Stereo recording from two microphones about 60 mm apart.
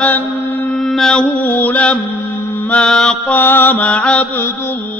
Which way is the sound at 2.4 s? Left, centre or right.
Left.